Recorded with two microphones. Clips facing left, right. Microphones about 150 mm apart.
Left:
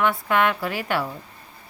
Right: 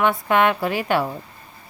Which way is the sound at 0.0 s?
20° right (ahead or behind).